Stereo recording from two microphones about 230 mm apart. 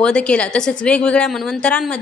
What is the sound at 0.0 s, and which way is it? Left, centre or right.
A woman's voice, centre.